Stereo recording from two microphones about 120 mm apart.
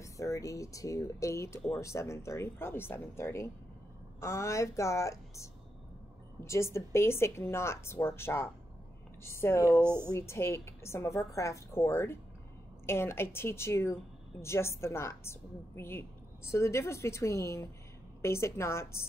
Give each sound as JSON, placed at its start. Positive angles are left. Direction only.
{"t": 0.0, "sound": "a woman's voice", "side_deg": 25}
{"t": 9.8, "sound": "speech", "side_deg": -20}
{"t": 10.1, "sound": "a woman's voice", "side_deg": 20}